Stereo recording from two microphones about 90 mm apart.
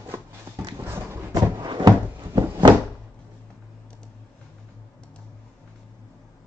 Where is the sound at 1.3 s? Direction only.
55° right (ahead or behind).